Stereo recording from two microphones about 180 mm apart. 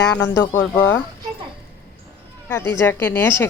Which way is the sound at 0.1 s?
10° left (ahead or behind).